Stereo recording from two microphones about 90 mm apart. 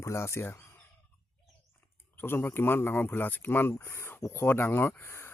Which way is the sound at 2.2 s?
25° left (ahead or behind).